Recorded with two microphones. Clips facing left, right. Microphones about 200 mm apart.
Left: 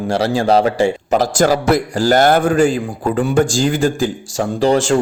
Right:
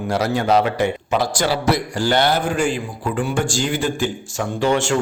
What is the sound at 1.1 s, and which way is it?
A man's voice, 45° left (ahead or behind).